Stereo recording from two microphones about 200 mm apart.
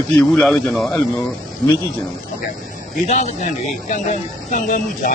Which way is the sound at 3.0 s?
35° left (ahead or behind).